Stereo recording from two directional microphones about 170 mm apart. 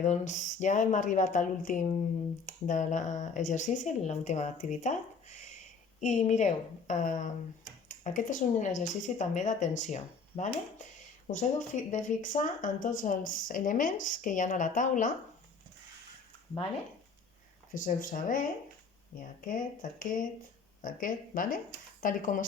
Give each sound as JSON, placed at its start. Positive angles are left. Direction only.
{"t": 0.0, "sound": "speech", "side_deg": 45}
{"t": 11.9, "sound": "speech", "side_deg": 45}
{"t": 17.7, "sound": "speech", "side_deg": 50}
{"t": 19.5, "sound": "speech", "side_deg": 55}